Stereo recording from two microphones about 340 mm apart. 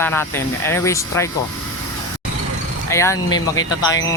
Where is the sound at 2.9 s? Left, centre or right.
Centre.